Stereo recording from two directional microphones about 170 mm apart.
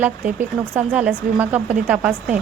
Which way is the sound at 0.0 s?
10° right (ahead or behind).